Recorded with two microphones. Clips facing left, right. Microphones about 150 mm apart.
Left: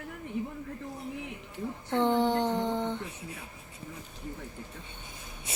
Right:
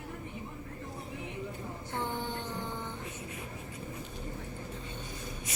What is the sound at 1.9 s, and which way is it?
Mantra, 75° left (ahead or behind).